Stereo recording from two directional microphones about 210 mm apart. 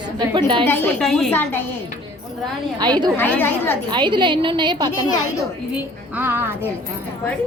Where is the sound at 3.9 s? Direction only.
20° right (ahead or behind).